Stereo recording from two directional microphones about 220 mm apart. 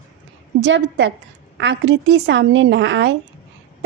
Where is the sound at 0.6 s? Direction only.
55° right (ahead or behind).